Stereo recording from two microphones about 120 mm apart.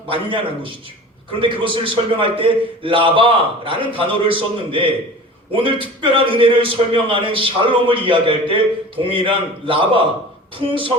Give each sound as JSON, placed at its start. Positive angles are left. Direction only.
{"t": 0.1, "sound": "a man's voice", "side_deg": -45}